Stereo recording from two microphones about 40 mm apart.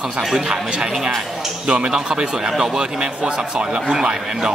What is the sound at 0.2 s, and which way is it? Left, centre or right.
Speech, centre.